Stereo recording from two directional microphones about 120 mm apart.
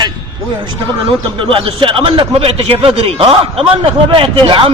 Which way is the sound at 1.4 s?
45° right (ahead or behind).